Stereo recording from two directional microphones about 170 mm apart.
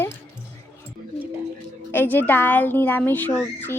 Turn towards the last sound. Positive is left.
turn(degrees=10)  # may be behind; listen again after turning